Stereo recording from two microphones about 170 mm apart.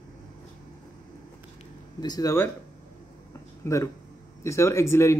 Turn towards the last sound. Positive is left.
turn(degrees=15)  # may be behind; listen again after turning